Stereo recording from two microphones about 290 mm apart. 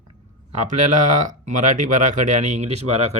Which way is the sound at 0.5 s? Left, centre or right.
Right.